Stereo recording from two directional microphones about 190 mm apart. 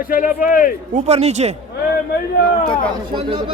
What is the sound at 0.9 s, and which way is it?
Speech, 35° right (ahead or behind).